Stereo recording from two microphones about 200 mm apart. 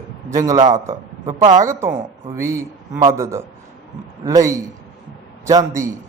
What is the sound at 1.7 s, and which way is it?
A man's voice, 15° right (ahead or behind).